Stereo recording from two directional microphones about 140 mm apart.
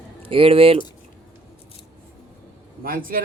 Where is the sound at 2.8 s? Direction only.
90° right.